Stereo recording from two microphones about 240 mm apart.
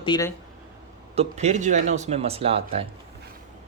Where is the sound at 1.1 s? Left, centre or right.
Right.